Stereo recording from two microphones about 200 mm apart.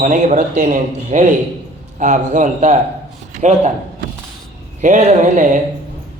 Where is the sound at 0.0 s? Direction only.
40° right (ahead or behind).